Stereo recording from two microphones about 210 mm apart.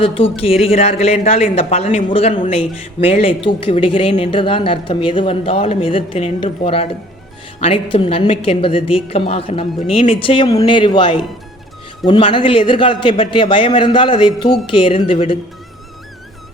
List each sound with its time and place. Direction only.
0.0 s speech: 25° left (ahead or behind)